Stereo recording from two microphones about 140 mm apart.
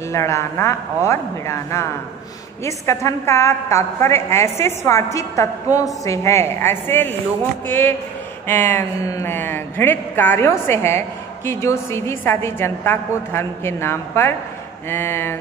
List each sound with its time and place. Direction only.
0.1 s a woman's voice: 20° left (ahead or behind)